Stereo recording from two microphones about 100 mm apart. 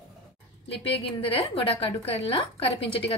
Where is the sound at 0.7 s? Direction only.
70° left (ahead or behind).